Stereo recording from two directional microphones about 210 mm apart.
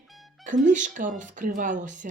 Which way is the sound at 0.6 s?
35° right (ahead or behind).